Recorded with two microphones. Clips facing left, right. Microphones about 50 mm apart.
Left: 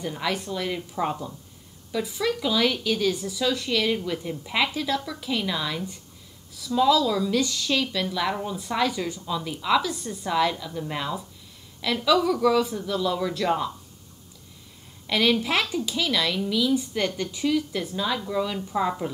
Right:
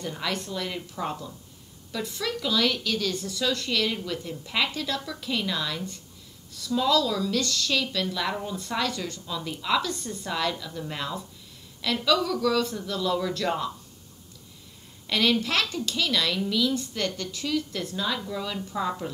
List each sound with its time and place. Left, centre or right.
0.0 s a woman's voice: centre
1.9 s a woman's voice: centre
15.0 s a woman's voice: centre